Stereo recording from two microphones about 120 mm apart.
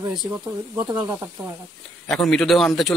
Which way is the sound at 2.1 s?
5° left (ahead or behind).